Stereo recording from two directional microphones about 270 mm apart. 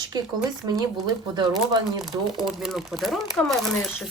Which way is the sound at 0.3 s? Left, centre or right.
Centre.